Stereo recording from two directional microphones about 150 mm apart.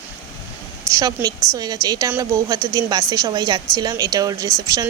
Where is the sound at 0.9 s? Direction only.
20° right (ahead or behind).